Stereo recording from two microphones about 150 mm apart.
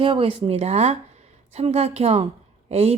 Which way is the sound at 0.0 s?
35° right (ahead or behind).